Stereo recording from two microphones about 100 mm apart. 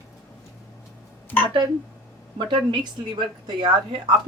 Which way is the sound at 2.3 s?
50° right (ahead or behind).